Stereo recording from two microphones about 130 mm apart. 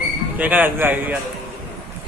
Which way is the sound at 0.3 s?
10° right (ahead or behind).